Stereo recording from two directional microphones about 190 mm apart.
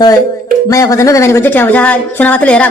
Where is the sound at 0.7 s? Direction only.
15° left (ahead or behind).